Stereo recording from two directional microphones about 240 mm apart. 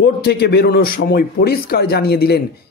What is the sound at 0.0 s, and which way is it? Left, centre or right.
A man's voice, left.